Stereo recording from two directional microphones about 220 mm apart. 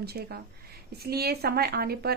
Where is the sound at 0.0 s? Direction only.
45° right (ahead or behind).